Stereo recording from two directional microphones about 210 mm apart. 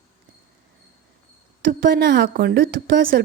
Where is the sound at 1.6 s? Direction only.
55° right (ahead or behind).